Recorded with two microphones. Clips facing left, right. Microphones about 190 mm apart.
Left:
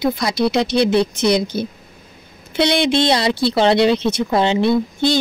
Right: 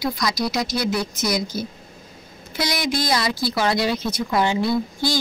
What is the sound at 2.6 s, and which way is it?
Speech, 25° left (ahead or behind).